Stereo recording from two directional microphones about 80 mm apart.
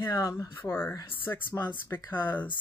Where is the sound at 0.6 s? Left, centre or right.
Left.